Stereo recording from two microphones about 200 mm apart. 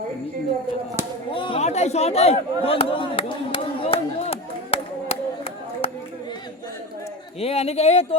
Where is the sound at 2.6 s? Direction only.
25° left (ahead or behind).